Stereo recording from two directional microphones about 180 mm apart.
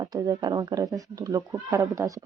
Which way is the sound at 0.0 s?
20° right (ahead or behind).